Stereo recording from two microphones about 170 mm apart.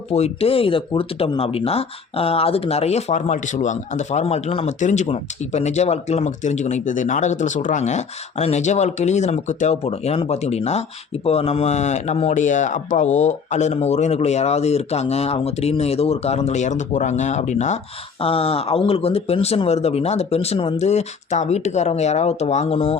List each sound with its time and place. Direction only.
0.1 s speech: 35° left (ahead or behind)